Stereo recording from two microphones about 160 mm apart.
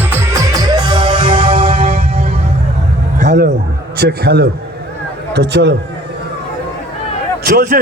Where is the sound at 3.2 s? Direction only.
90° right.